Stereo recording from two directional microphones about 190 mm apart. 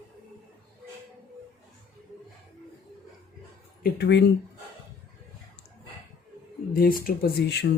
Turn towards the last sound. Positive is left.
turn(degrees=55)  # may be behind; listen again after turning